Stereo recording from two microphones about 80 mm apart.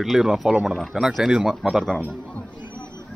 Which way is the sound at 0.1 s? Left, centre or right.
Centre.